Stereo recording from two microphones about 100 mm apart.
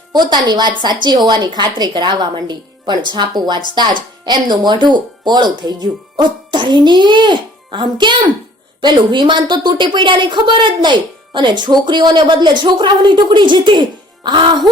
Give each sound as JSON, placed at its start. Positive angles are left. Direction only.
{"t": 0.1, "sound": "a woman's voice", "side_deg": -45}